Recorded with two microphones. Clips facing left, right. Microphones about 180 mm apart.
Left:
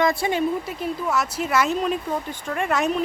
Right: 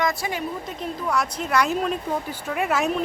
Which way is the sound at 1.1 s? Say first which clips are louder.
Right 1 dB; 5° left (ahead or behind).